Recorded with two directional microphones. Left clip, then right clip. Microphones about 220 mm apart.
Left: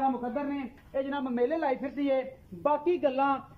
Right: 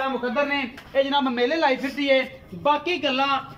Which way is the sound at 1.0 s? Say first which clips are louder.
Right 5 dB; 40° left (ahead or behind).